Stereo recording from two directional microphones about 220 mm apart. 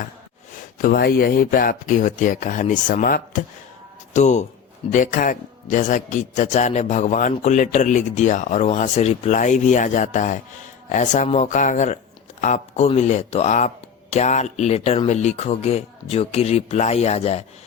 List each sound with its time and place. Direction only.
0.8 s a man's voice: 40° left (ahead or behind)